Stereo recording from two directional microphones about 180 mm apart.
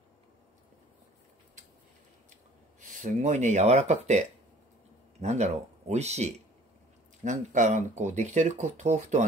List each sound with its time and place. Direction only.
2.9 s speech: 45° right (ahead or behind)
5.2 s speech: 40° right (ahead or behind)